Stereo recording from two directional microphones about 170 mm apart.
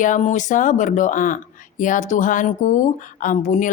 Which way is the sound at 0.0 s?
45° left (ahead or behind).